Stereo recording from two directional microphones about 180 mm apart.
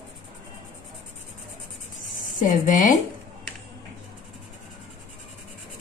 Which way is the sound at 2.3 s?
45° left (ahead or behind).